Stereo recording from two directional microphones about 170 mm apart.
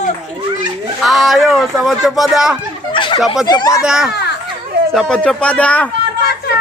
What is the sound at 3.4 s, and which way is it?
Speech, 25° left (ahead or behind).